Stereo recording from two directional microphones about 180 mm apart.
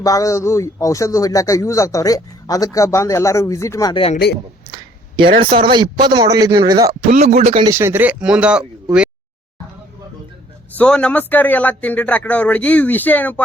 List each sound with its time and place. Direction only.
0.0 s speech: 20° left (ahead or behind)
4.7 s a sound: 30° right (ahead or behind)
5.4 s speech: 30° right (ahead or behind)
7.2 s speech: 35° right (ahead or behind)
7.7 s speech: 15° right (ahead or behind)
10.8 s speech: 5° left (ahead or behind)